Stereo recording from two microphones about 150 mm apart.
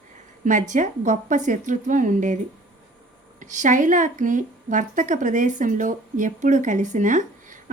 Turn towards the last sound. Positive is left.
turn(degrees=-55)  # may be behind; listen again after turning